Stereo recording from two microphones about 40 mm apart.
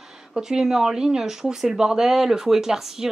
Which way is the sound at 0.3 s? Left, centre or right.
Centre.